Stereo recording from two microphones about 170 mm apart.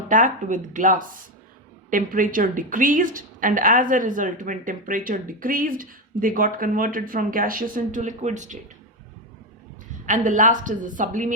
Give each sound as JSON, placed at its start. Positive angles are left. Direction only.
{"t": 0.1, "sound": "a woman's voice", "side_deg": -50}
{"t": 10.1, "sound": "a woman's voice", "side_deg": -50}